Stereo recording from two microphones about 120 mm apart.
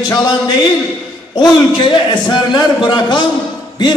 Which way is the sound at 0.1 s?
35° left (ahead or behind).